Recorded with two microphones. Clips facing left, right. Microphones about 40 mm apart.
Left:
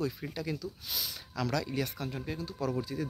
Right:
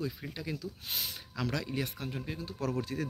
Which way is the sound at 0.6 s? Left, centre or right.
Right.